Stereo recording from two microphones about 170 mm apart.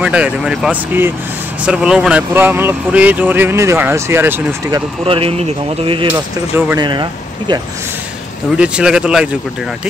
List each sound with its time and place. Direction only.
0.0 s speech: 5° right (ahead or behind)
5.0 s speech: 35° right (ahead or behind)
8.5 s speech: 5° right (ahead or behind)